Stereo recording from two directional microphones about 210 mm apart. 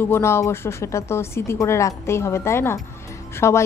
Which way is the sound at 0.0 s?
10° left (ahead or behind).